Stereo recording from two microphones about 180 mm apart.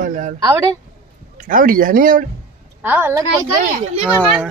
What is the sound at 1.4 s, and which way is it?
Speech, 50° right (ahead or behind).